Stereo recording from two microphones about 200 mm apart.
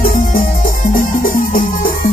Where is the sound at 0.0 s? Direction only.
45° left (ahead or behind).